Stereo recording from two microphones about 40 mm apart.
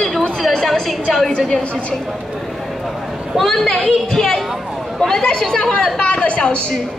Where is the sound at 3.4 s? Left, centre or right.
Centre.